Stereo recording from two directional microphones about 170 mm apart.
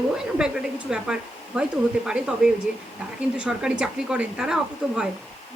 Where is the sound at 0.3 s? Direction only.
5° right (ahead or behind).